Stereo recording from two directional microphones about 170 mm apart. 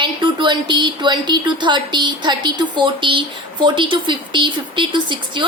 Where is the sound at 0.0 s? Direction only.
25° right (ahead or behind).